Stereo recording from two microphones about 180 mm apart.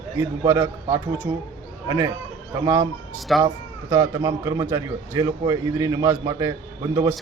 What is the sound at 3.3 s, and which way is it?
Speech, centre (ahead or behind).